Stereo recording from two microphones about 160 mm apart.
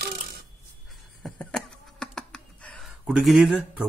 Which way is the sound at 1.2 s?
5° left (ahead or behind).